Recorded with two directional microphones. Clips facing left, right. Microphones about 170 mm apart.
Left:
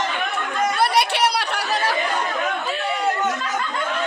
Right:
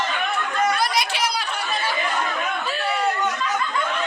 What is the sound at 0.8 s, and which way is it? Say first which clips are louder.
Chatter: left 5 dB; 65° left (ahead or behind).